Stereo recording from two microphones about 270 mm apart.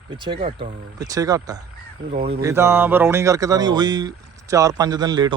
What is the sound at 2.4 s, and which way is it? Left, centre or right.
Speech, centre.